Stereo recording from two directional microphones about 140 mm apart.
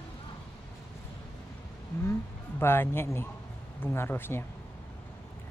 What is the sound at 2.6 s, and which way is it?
Speech, 15° left (ahead or behind).